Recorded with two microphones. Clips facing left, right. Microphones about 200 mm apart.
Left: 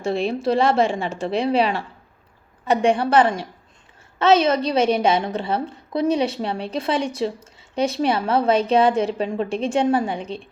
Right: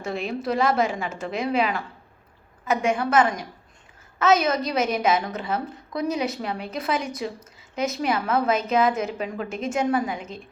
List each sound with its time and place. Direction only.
0.0 s a woman's voice: 30° left (ahead or behind)